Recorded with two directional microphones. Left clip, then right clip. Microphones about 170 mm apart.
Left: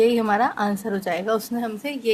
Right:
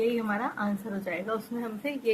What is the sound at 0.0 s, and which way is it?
A woman's voice, 55° left (ahead or behind).